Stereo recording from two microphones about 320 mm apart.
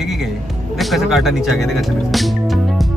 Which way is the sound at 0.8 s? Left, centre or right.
Centre.